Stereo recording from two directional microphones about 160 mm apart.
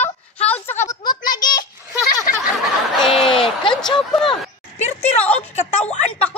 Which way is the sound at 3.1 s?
35° left (ahead or behind).